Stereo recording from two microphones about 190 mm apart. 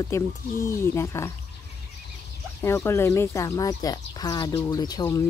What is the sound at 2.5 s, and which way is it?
Speech, 15° left (ahead or behind).